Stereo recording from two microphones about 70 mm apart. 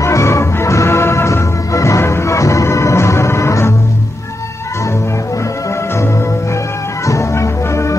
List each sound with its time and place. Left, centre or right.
0.0 s music: left
7.1 s music: left